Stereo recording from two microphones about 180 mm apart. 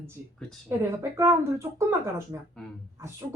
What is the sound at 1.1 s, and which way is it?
Speech, 15° right (ahead or behind).